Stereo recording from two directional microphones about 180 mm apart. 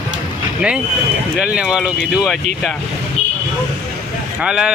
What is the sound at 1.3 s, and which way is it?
Speech, 5° right (ahead or behind).